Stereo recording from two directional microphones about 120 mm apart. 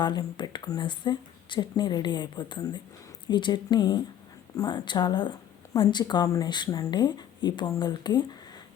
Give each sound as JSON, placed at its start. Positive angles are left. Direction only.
{"t": 0.0, "sound": "speech", "side_deg": 40}